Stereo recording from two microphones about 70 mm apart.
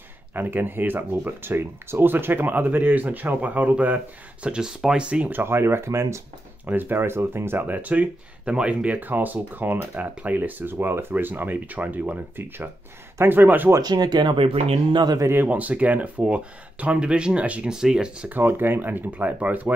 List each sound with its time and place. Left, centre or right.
0.3 s speech: right
5.4 s speech: right
6.6 s speech: right
13.7 s speech: right
15.4 s speech: right
18.3 s speech: right